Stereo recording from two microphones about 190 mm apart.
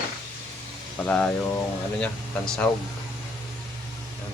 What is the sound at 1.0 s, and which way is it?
Speech, 5° left (ahead or behind).